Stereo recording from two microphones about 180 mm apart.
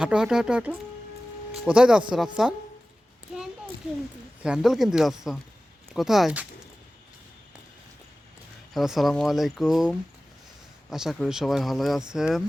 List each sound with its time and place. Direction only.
0.0 s speech: 5° right (ahead or behind)
4.4 s speech: 5° right (ahead or behind)
8.7 s speech: centre (ahead or behind)